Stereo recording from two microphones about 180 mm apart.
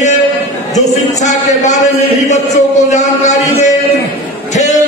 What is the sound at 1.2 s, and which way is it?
A man's voice, 40° left (ahead or behind).